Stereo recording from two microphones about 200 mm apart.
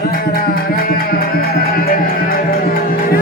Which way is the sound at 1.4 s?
50° left (ahead or behind).